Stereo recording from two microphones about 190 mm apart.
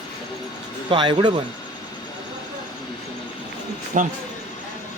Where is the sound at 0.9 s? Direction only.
25° right (ahead or behind).